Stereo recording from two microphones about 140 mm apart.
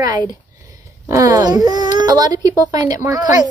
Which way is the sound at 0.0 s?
30° right (ahead or behind).